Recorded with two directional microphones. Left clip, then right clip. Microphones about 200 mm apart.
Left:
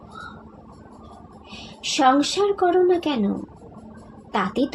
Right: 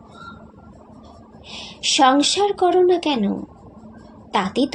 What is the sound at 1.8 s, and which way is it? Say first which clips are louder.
A woman's voice: right 3 dB; 25° right (ahead or behind).